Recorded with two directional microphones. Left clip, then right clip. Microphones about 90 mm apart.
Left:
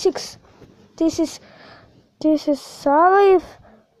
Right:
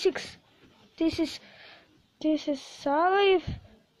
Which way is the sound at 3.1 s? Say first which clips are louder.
Left 9 dB; 35° left (ahead or behind).